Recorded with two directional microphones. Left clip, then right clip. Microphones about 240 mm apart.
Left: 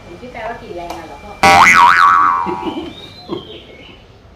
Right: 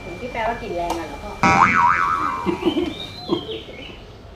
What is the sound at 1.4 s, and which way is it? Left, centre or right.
Boing, left.